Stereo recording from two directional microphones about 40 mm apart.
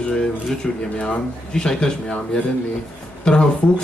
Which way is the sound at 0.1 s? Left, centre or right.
Left.